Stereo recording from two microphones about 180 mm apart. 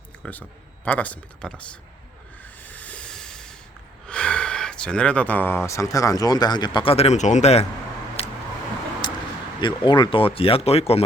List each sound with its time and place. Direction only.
0.2 s speech: 10° left (ahead or behind)
2.6 s train: 10° left (ahead or behind)
4.0 s speech: 5° left (ahead or behind); by 7.6 s 40° left (ahead or behind)
8.2 s vehicle: 30° left (ahead or behind)
9.0 s a sound: 25° left (ahead or behind)
9.6 s speech: 25° left (ahead or behind)